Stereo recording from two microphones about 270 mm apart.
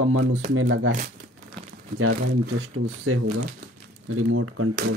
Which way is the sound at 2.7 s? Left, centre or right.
Right.